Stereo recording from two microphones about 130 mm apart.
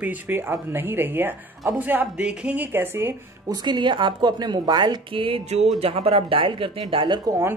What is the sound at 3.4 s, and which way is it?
Speech, 35° right (ahead or behind).